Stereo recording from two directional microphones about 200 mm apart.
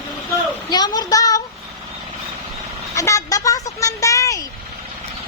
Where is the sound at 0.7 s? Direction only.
20° left (ahead or behind).